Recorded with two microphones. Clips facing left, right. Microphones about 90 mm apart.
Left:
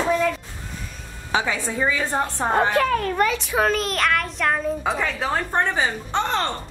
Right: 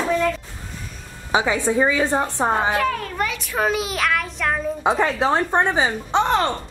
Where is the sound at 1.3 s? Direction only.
15° right (ahead or behind).